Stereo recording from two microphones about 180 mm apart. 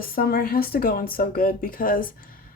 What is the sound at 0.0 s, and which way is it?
A woman's voice, 55° left (ahead or behind).